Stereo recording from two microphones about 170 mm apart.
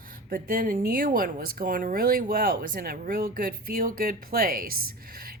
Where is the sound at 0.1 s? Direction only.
60° right (ahead or behind).